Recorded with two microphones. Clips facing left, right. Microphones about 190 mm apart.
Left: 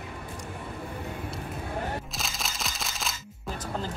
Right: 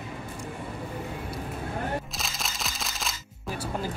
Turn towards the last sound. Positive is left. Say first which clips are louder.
# even
turn(degrees=0)  # may be behind; listen again after turning